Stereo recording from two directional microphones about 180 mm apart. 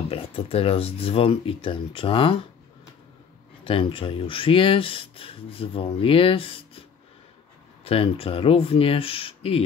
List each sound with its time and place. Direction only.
0.1 s speech: 30° left (ahead or behind)
3.6 s speech: 30° left (ahead or behind)
7.8 s speech: 30° left (ahead or behind)